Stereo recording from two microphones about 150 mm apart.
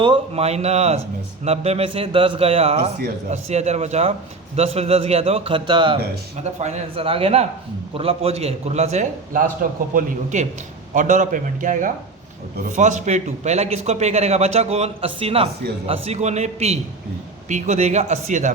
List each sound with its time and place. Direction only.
0.0 s a man's voice: 40° right (ahead or behind)
6.3 s a man's voice: 45° right (ahead or behind)
9.9 s a man's voice: 60° right (ahead or behind)